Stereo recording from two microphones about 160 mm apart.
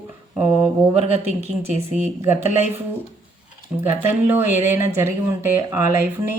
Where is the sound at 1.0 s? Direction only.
40° right (ahead or behind).